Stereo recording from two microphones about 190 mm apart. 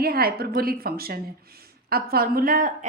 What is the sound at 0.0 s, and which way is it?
A woman's voice, 55° right (ahead or behind).